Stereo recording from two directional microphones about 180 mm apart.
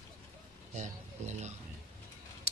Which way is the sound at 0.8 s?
40° right (ahead or behind).